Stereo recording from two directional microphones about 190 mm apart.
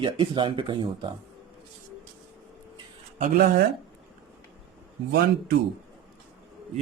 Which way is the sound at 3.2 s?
55° right (ahead or behind).